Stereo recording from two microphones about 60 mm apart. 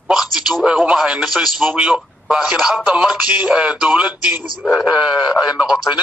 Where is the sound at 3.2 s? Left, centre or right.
Centre.